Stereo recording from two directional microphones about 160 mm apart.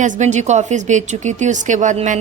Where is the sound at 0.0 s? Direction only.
50° right (ahead or behind).